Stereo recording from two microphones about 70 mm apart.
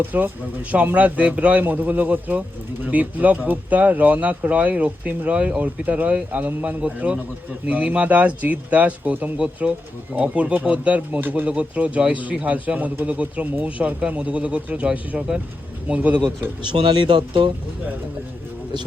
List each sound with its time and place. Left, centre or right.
0.0 s speech: right